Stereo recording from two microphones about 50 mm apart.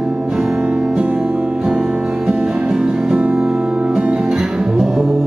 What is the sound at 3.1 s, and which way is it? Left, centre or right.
Music, right.